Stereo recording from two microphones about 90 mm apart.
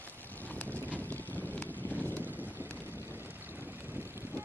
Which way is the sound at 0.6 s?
20° left (ahead or behind).